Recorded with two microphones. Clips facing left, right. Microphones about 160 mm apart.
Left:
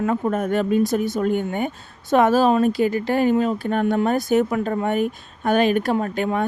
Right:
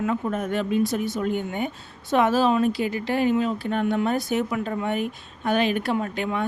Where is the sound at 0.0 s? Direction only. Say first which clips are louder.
Left 4 dB; 45° left (ahead or behind).